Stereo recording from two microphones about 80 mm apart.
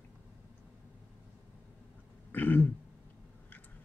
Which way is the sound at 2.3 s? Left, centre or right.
Left.